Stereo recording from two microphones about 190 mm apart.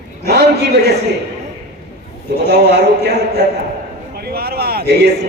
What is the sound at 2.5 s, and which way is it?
A man's voice, 60° right (ahead or behind).